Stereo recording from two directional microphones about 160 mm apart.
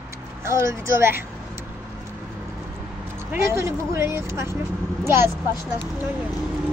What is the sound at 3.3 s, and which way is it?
A woman's voice, 15° right (ahead or behind).